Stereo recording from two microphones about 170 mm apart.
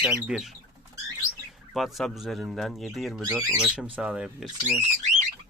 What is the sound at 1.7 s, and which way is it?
Speech, centre (ahead or behind).